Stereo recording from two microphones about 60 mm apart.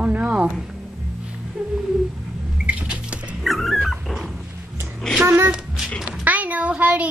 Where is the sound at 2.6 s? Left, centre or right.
Right.